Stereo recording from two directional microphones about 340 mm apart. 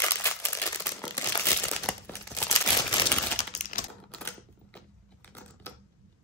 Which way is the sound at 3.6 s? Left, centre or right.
Left.